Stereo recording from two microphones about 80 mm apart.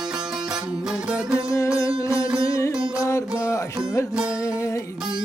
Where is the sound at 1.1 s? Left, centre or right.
Centre.